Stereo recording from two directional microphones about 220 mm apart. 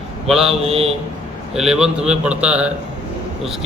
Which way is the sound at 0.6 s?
25° right (ahead or behind).